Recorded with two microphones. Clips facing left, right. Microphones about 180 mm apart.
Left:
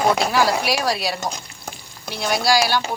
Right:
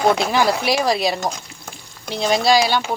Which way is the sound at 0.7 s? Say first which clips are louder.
Right 4 dB; 20° right (ahead or behind).